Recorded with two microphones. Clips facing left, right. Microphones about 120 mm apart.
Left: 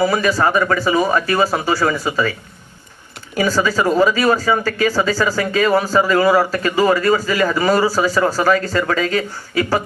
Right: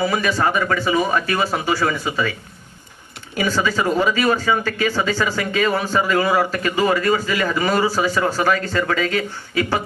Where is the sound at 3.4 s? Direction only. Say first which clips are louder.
Left 3 dB; 40° left (ahead or behind).